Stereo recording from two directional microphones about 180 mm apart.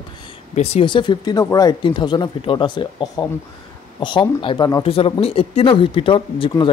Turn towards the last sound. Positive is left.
turn(degrees=30)  # may be behind; listen again after turning